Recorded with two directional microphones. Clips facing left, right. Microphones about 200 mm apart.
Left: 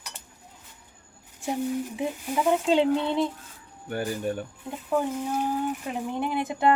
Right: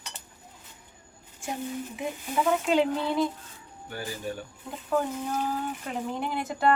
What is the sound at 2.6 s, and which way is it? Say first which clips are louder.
Speech: left 3 dB; 25° left (ahead or behind).